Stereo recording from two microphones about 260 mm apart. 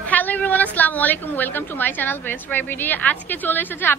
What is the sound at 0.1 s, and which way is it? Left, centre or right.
A woman's voice, centre.